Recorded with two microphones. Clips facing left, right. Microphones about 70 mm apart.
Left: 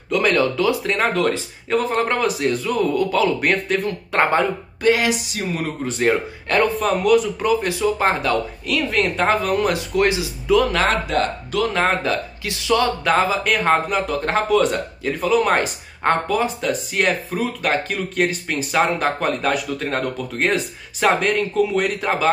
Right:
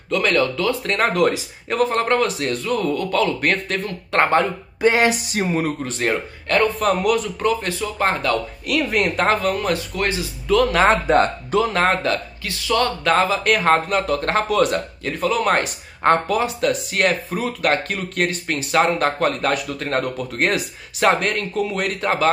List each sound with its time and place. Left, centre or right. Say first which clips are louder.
0.3 s speech: left 2 dB; centre
0.9 s speech: right 1 dB; centre
4.8 s music: right 1 dB; right
5.9 s speech: left 3 dB; centre
8.6 s speech: right 2 dB; centre
9.6 s speech: left 4 dB; centre
10.8 s speech: right 4 dB; right
11.7 s speech: right 1 dB; centre
12.4 s speech: left 1 dB; centre